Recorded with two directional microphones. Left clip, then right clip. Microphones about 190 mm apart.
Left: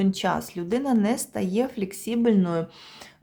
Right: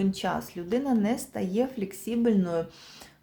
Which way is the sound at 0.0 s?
25° left (ahead or behind).